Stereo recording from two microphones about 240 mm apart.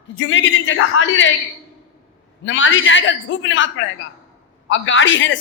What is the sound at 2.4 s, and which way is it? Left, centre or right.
A man's voice, left.